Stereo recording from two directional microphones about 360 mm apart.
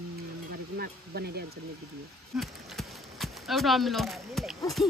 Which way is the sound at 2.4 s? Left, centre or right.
Centre.